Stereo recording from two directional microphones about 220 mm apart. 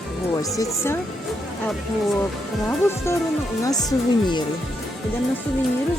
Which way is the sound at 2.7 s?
10° left (ahead or behind).